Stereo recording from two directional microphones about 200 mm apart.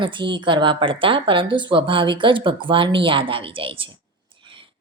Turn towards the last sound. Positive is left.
turn(degrees=-25)  # may be behind; listen again after turning